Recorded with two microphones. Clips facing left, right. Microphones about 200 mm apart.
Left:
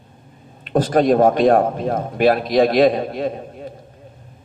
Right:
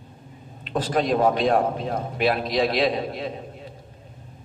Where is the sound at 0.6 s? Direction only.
45° left (ahead or behind).